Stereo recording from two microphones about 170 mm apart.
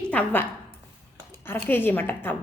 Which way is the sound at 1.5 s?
10° left (ahead or behind).